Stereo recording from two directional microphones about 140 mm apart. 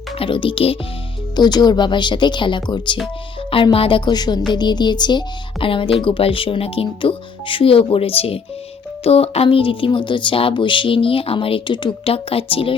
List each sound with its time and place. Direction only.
0.2 s speech: 35° left (ahead or behind)
1.4 s speech: 30° left (ahead or behind)